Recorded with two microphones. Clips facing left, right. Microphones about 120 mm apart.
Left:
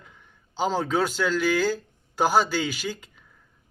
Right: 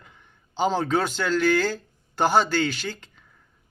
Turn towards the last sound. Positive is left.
turn(degrees=10)  # may be behind; listen again after turning